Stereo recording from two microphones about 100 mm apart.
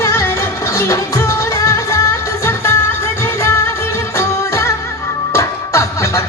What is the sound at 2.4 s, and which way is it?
Music, 25° left (ahead or behind).